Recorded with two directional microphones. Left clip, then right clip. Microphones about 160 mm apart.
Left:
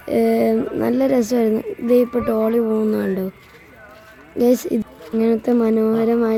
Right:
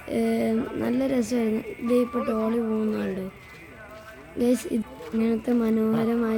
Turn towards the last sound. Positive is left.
turn(degrees=25)  # may be behind; listen again after turning